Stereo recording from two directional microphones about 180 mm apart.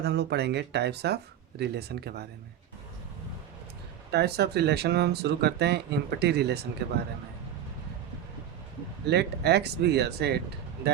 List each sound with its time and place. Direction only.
0.0 s speech: 65° right (ahead or behind)
4.1 s speech: 65° right (ahead or behind)
9.0 s speech: 65° right (ahead or behind)